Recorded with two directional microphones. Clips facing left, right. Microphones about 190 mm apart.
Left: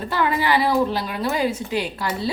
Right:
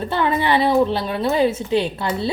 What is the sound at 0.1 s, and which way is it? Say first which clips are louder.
A woman's voice: right 1 dB; 25° right (ahead or behind).